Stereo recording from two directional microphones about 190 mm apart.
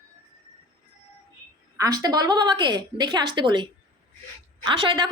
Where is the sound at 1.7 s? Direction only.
20° right (ahead or behind).